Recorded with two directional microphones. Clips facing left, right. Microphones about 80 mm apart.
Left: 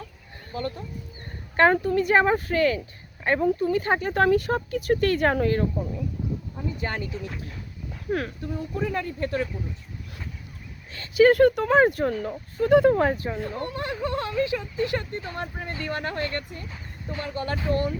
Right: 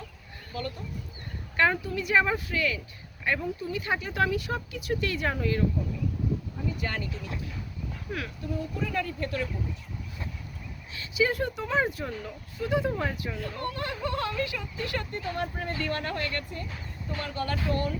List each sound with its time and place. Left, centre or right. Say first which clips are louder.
0.5 s speech: left 4 dB; left
1.5 s speech: left 7 dB; left
6.7 s speech: left 3 dB; left
8.1 s speech: left 9 dB; left
8.8 s speech: left 5 dB; left
10.9 s speech: left 10 dB; left
15.5 s speech: even; centre